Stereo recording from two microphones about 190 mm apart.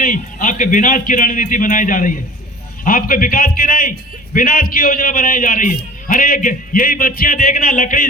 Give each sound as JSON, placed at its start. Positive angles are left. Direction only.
{"t": 0.0, "sound": "a man's voice", "side_deg": 45}